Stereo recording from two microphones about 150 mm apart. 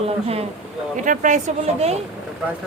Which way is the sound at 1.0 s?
55° right (ahead or behind).